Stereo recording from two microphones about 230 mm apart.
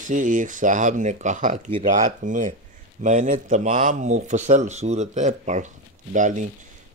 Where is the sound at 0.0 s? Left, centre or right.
Right.